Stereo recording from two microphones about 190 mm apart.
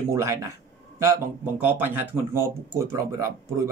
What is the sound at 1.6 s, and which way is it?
Speech, 10° right (ahead or behind).